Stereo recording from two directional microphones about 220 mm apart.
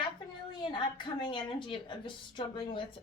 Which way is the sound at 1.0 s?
20° left (ahead or behind).